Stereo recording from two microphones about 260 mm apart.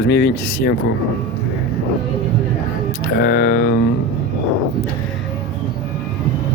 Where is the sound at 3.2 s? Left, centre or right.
Left.